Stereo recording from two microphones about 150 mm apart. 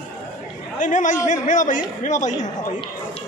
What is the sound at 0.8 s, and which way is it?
A man's voice, 60° left (ahead or behind).